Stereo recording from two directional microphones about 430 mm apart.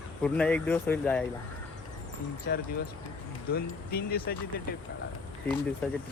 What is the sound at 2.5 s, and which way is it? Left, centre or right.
Speech, left.